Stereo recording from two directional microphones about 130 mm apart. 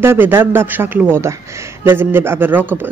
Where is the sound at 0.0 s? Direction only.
20° right (ahead or behind).